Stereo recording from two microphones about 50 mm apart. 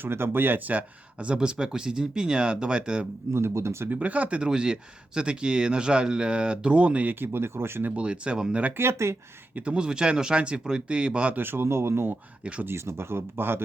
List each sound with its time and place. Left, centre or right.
0.0 s speech: right
0.7 s speech: right
3.3 s speech: right
3.8 s speech: right
7.2 s speech: right
7.9 s speech: right
8.8 s speech: right
9.7 s speech: centre
11.3 s speech: right